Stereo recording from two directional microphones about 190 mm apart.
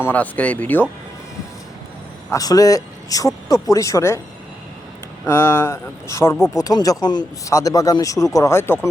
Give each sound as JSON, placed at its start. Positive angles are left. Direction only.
{"t": 0.0, "sound": "speech", "side_deg": 10}
{"t": 2.3, "sound": "speech", "side_deg": 20}
{"t": 5.2, "sound": "speech", "side_deg": 10}